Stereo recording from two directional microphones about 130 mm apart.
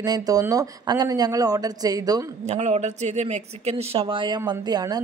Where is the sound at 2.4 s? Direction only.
60° right (ahead or behind).